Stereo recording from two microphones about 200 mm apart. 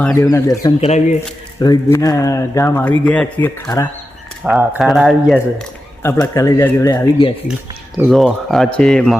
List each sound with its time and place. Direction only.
0.0 s speech: 15° left (ahead or behind)
0.8 s speech: 35° left (ahead or behind)
1.5 s speech: 20° left (ahead or behind)
4.4 s speech: 5° right (ahead or behind)
6.0 s speech: 10° left (ahead or behind)
7.9 s speech: centre (ahead or behind)